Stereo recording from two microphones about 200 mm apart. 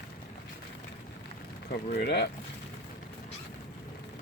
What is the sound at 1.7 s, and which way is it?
Speech, 50° left (ahead or behind).